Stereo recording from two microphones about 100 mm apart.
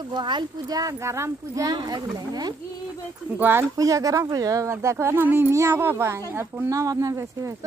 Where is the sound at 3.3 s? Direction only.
20° right (ahead or behind).